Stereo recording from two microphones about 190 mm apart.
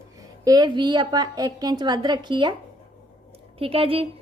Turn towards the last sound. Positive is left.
turn(degrees=-30)  # may be behind; listen again after turning